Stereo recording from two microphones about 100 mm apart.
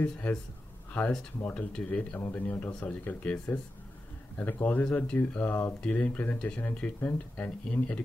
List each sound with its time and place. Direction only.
0.0 s speech: 15° left (ahead or behind)
1.4 s speech: 15° left (ahead or behind)